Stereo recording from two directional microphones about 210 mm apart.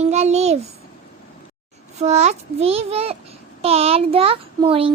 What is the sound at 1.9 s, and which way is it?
Speech, 35° right (ahead or behind).